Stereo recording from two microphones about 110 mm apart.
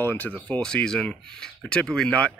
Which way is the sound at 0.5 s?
10° left (ahead or behind).